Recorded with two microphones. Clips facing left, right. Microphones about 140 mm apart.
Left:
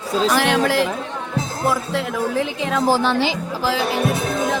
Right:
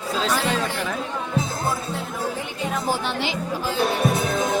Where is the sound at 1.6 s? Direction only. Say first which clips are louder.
Left 6 dB; 90° left.